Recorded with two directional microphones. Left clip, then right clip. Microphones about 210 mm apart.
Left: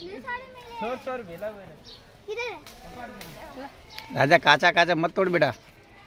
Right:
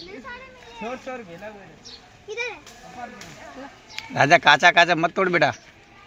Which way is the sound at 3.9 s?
5° left (ahead or behind).